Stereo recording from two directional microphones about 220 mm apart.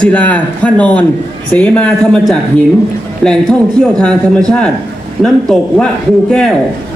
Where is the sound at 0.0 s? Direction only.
5° left (ahead or behind).